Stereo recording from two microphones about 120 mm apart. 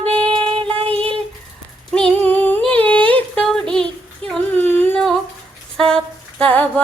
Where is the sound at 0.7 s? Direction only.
50° right (ahead or behind).